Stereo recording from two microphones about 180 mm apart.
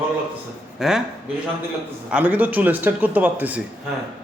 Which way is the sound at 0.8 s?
5° right (ahead or behind).